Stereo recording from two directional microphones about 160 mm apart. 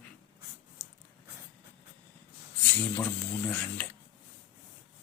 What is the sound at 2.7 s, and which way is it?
Speech, 10° left (ahead or behind).